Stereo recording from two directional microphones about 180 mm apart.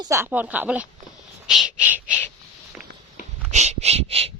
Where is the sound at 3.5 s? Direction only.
40° right (ahead or behind).